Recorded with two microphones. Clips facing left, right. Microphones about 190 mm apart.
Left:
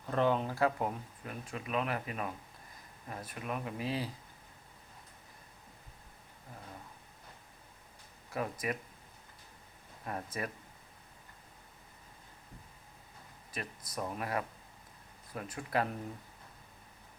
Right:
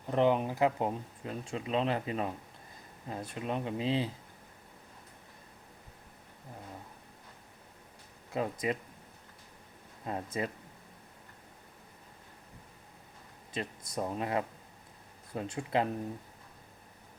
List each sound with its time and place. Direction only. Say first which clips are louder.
0.0 s speech: right 3 dB; 20° right (ahead or behind)
8.3 s speech: right 4 dB; 20° right (ahead or behind)
10.0 s speech: right 4 dB; 20° right (ahead or behind)
13.5 s speech: right 5 dB; 25° right (ahead or behind)